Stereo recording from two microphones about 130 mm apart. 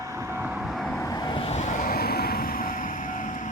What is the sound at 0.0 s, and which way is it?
Vehicle, 20° right (ahead or behind).